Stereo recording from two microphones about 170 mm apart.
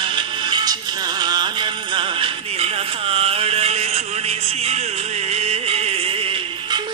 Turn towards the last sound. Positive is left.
turn(degrees=-35)  # may be behind; listen again after turning